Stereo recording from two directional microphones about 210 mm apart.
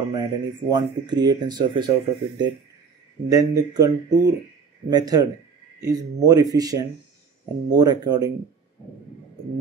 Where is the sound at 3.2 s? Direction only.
15° right (ahead or behind).